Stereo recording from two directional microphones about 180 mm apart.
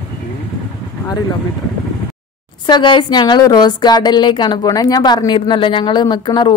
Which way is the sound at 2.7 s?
25° left (ahead or behind).